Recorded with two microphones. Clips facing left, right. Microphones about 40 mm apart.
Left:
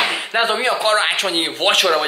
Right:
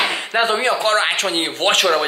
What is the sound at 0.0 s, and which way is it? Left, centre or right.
Speech, centre.